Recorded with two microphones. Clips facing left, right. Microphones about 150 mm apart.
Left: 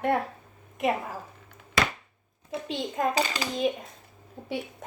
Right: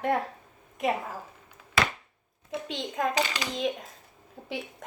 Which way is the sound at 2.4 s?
Centre (ahead or behind).